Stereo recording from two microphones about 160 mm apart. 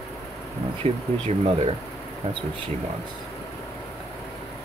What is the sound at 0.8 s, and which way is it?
Speech, 40° right (ahead or behind).